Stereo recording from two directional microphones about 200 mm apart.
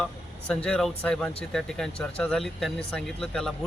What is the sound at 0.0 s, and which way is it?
Speech, 5° left (ahead or behind).